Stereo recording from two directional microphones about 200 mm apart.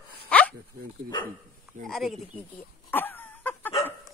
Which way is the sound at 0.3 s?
5° left (ahead or behind).